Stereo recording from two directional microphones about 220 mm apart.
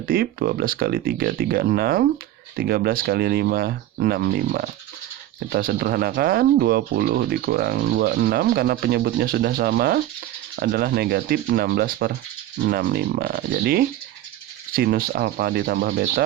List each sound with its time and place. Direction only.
0.1 s speech: 45° right (ahead or behind)